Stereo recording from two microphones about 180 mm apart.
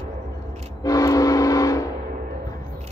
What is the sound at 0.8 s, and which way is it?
Train, 20° left (ahead or behind).